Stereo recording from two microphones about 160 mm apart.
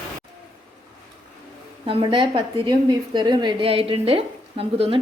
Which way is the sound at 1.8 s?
30° right (ahead or behind).